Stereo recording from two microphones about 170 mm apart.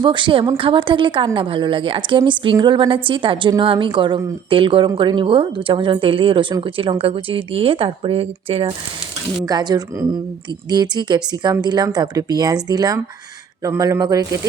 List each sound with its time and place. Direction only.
0.0 s a woman's voice: 30° right (ahead or behind)
9.5 s speech: 25° right (ahead or behind)